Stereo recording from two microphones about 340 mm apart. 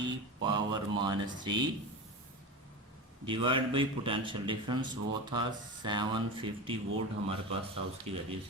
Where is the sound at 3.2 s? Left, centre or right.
Centre.